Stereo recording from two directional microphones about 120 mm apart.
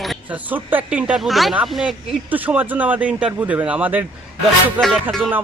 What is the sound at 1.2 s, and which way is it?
Music, centre (ahead or behind).